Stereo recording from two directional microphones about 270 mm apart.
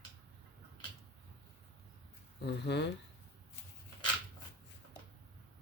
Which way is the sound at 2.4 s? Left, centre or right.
Left.